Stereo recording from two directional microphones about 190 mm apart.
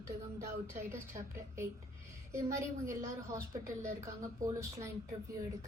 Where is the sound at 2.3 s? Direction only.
15° right (ahead or behind).